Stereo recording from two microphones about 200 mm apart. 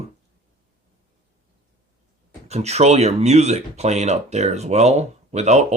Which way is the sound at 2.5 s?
35° right (ahead or behind).